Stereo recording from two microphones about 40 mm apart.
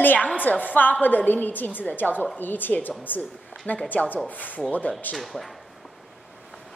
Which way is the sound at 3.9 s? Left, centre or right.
Left.